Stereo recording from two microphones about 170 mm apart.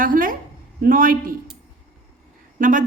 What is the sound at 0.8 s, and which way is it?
Speech, 55° right (ahead or behind).